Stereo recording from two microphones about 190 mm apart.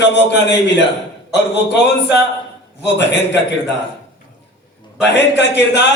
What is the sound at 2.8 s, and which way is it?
Speech, 65° left (ahead or behind).